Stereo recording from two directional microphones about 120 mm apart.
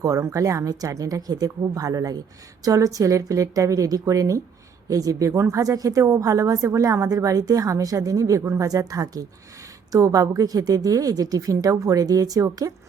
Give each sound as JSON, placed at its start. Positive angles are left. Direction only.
{"t": 0.0, "sound": "a woman's voice", "side_deg": -30}